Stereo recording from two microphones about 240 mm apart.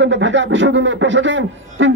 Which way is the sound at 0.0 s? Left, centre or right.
Right.